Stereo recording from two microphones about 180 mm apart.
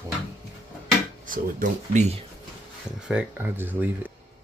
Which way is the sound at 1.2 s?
50° right (ahead or behind).